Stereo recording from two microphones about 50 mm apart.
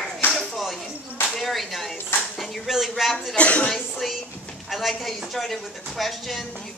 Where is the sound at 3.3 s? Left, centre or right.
Left.